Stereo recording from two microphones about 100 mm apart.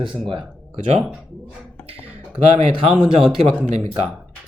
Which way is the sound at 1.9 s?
70° right (ahead or behind).